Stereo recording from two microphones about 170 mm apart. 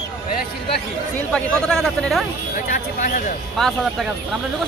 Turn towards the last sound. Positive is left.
turn(degrees=0)  # may be behind; listen again after turning